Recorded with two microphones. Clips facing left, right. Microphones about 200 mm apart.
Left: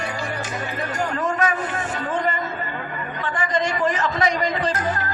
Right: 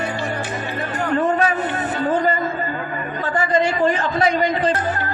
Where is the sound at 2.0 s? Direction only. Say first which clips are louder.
Right 6 dB; 35° right (ahead or behind).